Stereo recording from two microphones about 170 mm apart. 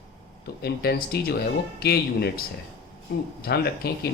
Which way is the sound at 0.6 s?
65° left (ahead or behind).